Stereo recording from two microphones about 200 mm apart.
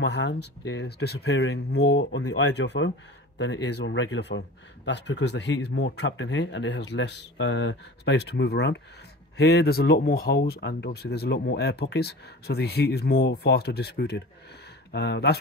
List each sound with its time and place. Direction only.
0.0 s speech: 60° left (ahead or behind)